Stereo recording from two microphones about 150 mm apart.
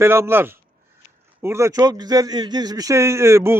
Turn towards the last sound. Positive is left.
turn(degrees=-20)  # may be behind; listen again after turning